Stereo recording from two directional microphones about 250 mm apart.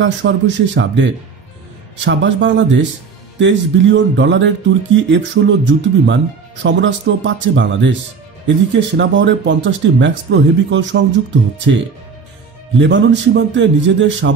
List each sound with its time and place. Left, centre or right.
0.0 s speech: right
12.7 s speech: right